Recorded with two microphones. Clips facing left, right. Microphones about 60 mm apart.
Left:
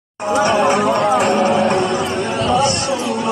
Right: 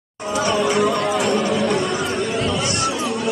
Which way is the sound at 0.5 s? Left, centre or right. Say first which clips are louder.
Left 2 dB; left.